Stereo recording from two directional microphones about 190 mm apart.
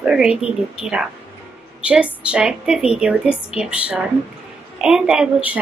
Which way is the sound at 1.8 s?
5° right (ahead or behind).